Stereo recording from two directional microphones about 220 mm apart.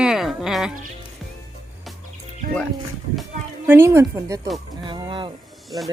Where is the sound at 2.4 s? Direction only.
40° right (ahead or behind).